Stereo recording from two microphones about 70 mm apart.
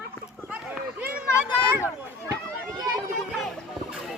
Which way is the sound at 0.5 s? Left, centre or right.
Centre.